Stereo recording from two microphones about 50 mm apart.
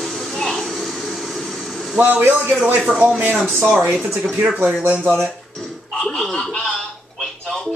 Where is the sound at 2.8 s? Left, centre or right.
Centre.